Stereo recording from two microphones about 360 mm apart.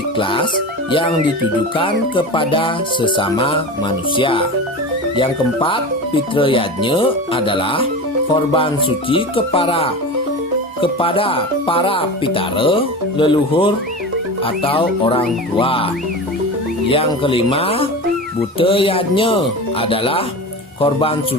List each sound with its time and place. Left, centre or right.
0.2 s music: centre
1.7 s speech: centre
16.9 s speech: centre